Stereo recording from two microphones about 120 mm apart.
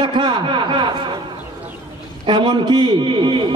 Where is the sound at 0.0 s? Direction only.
40° right (ahead or behind).